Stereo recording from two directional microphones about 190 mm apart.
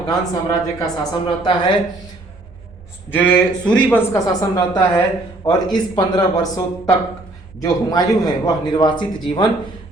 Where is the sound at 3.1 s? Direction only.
5° left (ahead or behind).